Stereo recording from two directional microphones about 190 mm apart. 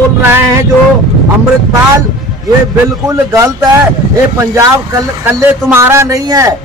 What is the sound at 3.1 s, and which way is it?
Speech, 15° right (ahead or behind).